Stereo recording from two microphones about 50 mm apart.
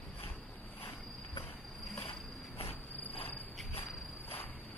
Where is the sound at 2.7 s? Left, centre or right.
Left.